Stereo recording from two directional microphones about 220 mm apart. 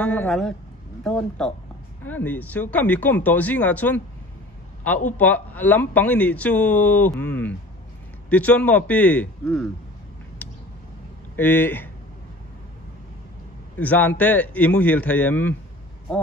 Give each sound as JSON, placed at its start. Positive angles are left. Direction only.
{"t": 0.0, "sound": "speech", "side_deg": 5}
{"t": 5.1, "sound": "speech", "side_deg": 5}
{"t": 10.4, "sound": "a sound", "side_deg": 5}
{"t": 11.3, "sound": "speech", "side_deg": 10}
{"t": 13.7, "sound": "speech", "side_deg": 5}